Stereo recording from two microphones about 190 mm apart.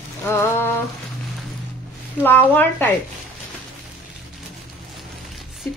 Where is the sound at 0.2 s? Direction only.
15° left (ahead or behind).